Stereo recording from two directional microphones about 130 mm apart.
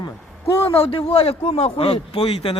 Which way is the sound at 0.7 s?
45° left (ahead or behind).